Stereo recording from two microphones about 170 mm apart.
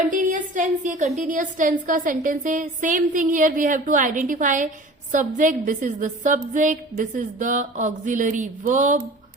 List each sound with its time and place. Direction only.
0.1 s a woman's voice: 50° right (ahead or behind)